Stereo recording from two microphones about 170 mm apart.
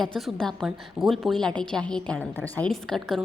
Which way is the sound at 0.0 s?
Centre (ahead or behind).